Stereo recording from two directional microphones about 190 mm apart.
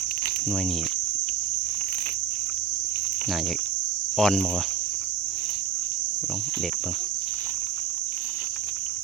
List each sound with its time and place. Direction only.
4.2 s cricket: centre (ahead or behind)